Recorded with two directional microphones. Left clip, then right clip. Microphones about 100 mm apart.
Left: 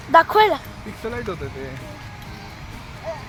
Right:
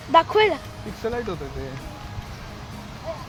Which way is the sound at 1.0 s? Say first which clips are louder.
Right 1 dB; 35° right (ahead or behind).